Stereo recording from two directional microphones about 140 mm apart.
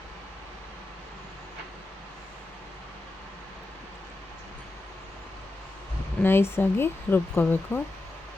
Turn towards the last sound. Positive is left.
turn(degrees=15)  # may be behind; listen again after turning